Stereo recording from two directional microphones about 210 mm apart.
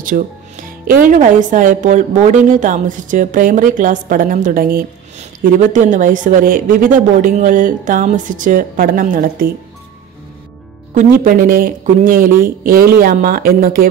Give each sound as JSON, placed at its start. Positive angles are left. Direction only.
{"t": 0.1, "sound": "speech", "side_deg": -45}
{"t": 11.2, "sound": "speech", "side_deg": -40}